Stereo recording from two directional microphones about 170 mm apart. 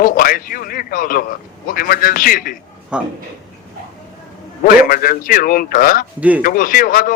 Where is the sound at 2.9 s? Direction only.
5° right (ahead or behind).